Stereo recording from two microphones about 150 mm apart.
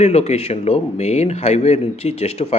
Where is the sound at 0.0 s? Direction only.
45° left (ahead or behind).